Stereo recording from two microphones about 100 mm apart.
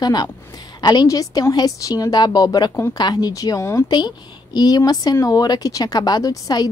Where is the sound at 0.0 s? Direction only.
45° left (ahead or behind).